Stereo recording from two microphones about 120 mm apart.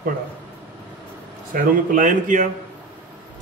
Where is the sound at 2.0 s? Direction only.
90° right.